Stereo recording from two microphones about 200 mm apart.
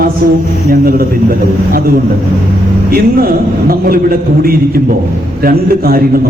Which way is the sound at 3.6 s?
45° right (ahead or behind).